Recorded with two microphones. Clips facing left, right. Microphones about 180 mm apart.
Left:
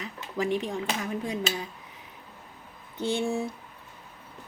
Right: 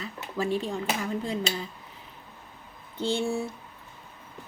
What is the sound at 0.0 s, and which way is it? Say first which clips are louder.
Speech: even; 15° left (ahead or behind).